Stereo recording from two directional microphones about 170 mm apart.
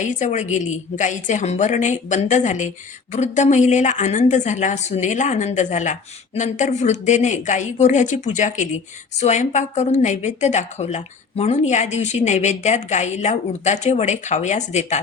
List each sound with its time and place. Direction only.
0.0 s a woman's voice: 45° left (ahead or behind)